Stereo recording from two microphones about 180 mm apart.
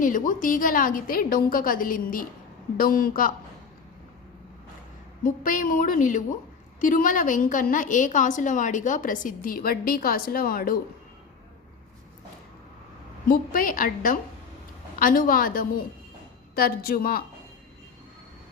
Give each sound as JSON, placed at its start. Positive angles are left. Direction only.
{"t": 0.0, "sound": "a woman's voice", "side_deg": 45}
{"t": 5.2, "sound": "a woman's voice", "side_deg": 50}
{"t": 13.2, "sound": "a woman's voice", "side_deg": 50}